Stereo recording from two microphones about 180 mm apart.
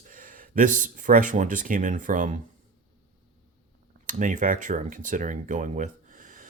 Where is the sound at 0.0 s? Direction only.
50° right (ahead or behind).